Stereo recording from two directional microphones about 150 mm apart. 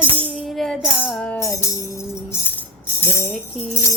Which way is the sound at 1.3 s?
20° left (ahead or behind).